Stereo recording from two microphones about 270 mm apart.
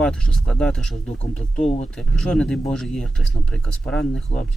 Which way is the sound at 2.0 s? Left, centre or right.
Centre.